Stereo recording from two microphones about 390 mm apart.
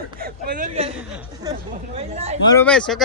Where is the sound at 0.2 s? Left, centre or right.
Right.